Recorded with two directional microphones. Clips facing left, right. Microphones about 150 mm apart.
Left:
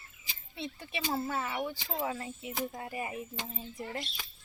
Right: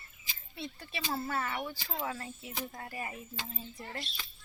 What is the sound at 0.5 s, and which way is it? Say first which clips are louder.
Speech: left 3 dB; 20° left (ahead or behind).